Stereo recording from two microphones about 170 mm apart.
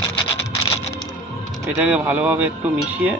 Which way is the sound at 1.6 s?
10° right (ahead or behind).